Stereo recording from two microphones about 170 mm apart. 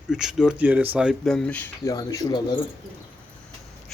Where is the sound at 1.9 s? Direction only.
20° left (ahead or behind).